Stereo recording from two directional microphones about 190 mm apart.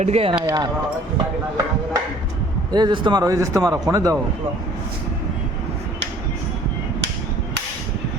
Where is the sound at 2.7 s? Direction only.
25° right (ahead or behind).